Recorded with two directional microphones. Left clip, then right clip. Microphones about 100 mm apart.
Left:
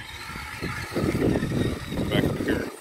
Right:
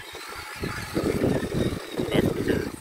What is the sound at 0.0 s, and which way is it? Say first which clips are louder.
Vehicle: left 1 dB; 15° right (ahead or behind).